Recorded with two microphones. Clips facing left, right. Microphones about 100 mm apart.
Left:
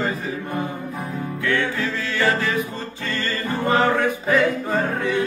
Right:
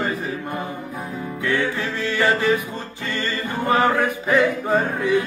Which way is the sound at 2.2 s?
20° right (ahead or behind).